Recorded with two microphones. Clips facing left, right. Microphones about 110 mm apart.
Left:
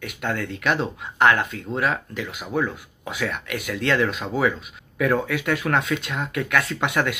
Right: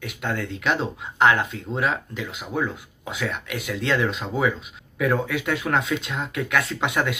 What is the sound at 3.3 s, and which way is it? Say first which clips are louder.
Speech: left 1 dB; 55° left (ahead or behind).